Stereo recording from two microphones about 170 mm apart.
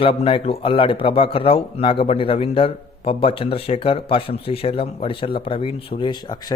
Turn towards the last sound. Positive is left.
turn(degrees=25)  # may be behind; listen again after turning